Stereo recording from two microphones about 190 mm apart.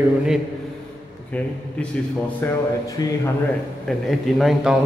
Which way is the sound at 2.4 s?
10° left (ahead or behind).